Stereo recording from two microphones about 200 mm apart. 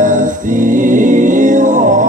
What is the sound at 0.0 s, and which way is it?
Music, 40° right (ahead or behind).